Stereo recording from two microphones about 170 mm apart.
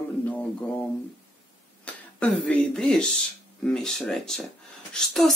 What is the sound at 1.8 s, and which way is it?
Speech, 5° left (ahead or behind).